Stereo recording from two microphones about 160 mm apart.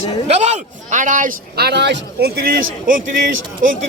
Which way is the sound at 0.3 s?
45° right (ahead or behind).